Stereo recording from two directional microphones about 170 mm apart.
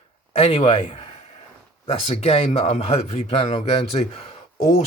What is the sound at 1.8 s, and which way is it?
Speech, 35° left (ahead or behind).